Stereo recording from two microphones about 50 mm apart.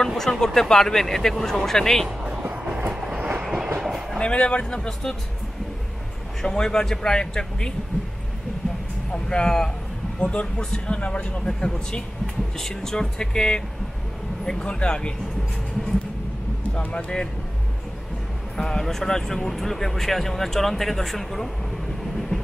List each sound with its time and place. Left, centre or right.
0.1 s speech: centre
2.4 s train: right
3.4 s train: centre
4.2 s speech: left
6.4 s speech: centre
9.1 s speech: centre
12.5 s speech: centre
16.7 s speech: left
18.6 s speech: centre